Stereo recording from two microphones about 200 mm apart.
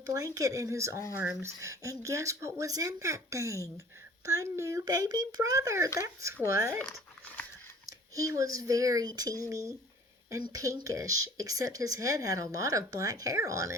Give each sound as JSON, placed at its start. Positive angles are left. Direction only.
{"t": 0.1, "sound": "speech", "side_deg": -15}
{"t": 7.9, "sound": "a sound", "side_deg": -15}
{"t": 8.4, "sound": "speech", "side_deg": -15}